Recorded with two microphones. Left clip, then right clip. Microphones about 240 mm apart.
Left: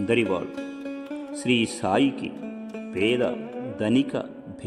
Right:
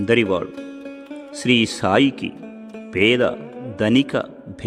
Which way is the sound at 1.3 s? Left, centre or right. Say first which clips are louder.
Right 6 dB; right.